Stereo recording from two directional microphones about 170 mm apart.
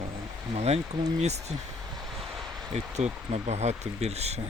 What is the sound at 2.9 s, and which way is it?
Speech, 40° right (ahead or behind).